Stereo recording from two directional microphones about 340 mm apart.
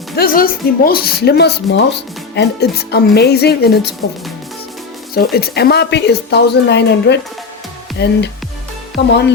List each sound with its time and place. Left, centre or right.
0.2 s a woman's voice: left
5.1 s a woman's voice: left